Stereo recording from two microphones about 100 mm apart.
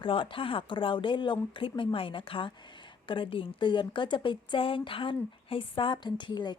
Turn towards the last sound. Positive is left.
turn(degrees=50)  # may be behind; listen again after turning